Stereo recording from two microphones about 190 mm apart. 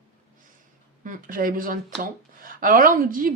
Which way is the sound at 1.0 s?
45° right (ahead or behind).